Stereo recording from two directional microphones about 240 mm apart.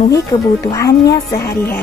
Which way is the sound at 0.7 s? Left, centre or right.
Centre.